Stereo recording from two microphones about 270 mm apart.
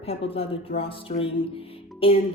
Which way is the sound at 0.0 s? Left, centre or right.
Left.